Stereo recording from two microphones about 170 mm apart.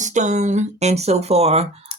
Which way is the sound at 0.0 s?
45° right (ahead or behind).